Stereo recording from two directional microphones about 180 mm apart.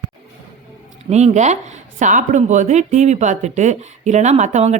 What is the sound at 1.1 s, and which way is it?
Speech, 40° right (ahead or behind).